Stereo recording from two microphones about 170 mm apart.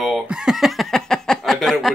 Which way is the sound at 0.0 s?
Centre (ahead or behind).